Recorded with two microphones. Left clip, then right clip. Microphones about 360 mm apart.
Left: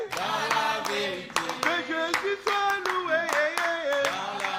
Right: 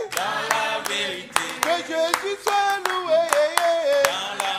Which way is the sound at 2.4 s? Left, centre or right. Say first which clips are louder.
Right 8 dB; centre.